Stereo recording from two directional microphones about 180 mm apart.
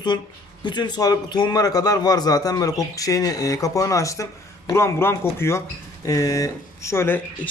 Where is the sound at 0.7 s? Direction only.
25° left (ahead or behind).